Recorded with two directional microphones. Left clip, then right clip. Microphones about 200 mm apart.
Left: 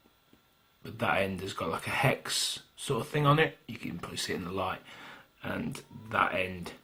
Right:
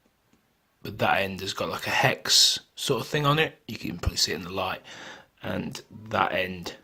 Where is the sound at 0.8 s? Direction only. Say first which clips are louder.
Right 5 dB; 50° right (ahead or behind).